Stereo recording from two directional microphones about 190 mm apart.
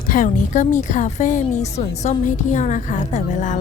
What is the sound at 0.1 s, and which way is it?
A woman's voice, 45° left (ahead or behind).